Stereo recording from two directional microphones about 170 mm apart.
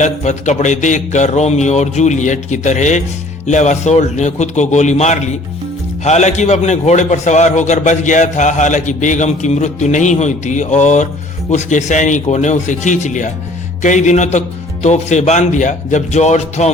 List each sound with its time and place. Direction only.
0.0 s a man's voice: 45° left (ahead or behind)